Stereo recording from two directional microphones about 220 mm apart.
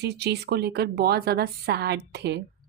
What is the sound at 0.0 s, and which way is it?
Speech, 50° right (ahead or behind).